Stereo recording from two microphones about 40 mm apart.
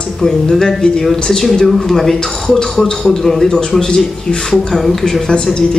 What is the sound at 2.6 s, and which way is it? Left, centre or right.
Speech, centre.